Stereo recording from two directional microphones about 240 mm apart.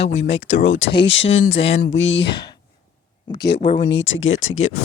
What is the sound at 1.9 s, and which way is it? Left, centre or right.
Speech, left.